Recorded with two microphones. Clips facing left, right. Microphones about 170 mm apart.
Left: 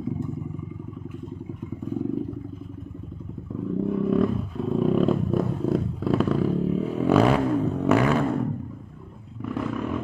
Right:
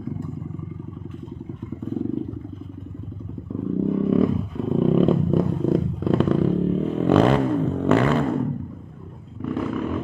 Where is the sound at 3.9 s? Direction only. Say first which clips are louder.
Right 3 dB; centre (ahead or behind).